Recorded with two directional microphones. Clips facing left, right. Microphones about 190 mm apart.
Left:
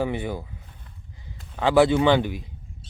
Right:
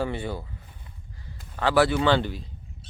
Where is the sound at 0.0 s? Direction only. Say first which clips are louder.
Left 2 dB; 15° left (ahead or behind).